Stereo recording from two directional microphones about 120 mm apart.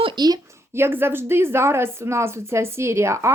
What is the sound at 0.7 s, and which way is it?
A woman's voice, 20° right (ahead or behind).